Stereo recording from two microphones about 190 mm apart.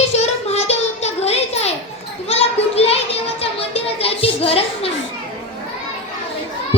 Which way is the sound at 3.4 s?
30° left (ahead or behind).